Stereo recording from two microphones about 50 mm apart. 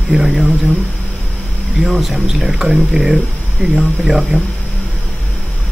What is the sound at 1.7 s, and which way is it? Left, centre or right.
Speech, centre.